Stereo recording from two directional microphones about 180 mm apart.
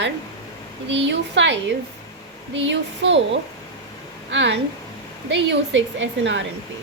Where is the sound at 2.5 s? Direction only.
85° right.